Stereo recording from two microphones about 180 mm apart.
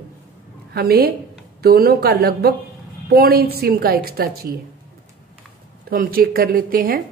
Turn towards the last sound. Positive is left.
turn(degrees=-55)  # may be behind; listen again after turning